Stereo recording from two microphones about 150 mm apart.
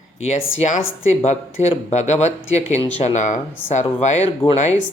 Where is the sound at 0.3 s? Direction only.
50° left (ahead or behind).